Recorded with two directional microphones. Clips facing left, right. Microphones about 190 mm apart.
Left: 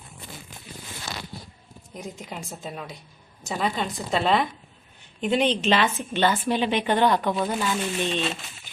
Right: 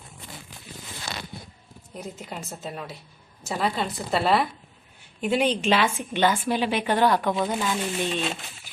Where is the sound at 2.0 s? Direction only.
5° right (ahead or behind).